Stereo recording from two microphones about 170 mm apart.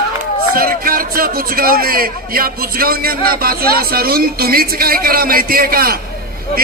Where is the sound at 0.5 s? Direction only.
60° right (ahead or behind).